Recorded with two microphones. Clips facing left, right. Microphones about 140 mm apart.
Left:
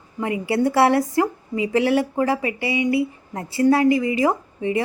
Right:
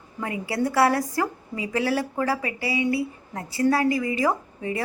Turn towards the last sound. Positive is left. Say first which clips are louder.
# left 4 dB
turn(degrees=25)  # may be behind; listen again after turning